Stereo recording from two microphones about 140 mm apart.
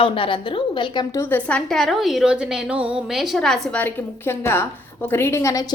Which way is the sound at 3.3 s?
5° left (ahead or behind).